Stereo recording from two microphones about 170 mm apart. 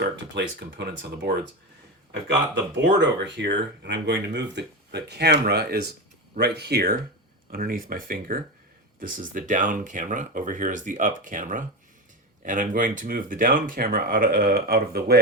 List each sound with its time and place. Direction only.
0.0 s speech: 75° right (ahead or behind)
3.0 s speech: 90° right; by 6.9 s 70° right (ahead or behind)
7.5 s speech: 60° right (ahead or behind)